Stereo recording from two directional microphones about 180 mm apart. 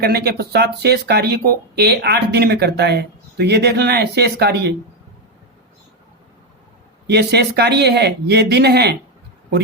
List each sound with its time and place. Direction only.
0.0 s speech: 60° right (ahead or behind)
7.1 s speech: 65° right (ahead or behind)